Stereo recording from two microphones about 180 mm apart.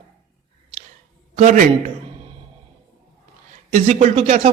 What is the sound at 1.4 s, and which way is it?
Speech, 40° right (ahead or behind).